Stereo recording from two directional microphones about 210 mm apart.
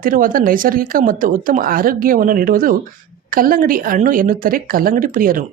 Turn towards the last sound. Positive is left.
turn(degrees=-40)  # may be behind; listen again after turning